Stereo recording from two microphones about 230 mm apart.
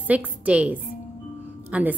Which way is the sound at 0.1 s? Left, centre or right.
Centre.